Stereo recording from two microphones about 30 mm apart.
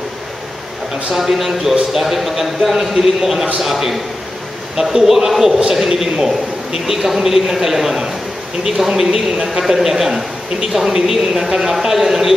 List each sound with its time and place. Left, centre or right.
1.1 s a man's voice: centre